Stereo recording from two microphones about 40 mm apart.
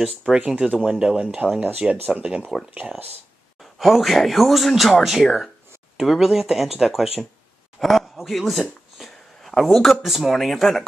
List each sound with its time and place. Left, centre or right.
0.0 s speech: centre
1.6 s speech: right
3.8 s a man's voice: centre